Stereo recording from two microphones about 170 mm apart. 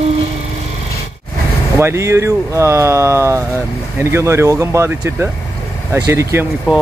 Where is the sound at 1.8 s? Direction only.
15° right (ahead or behind).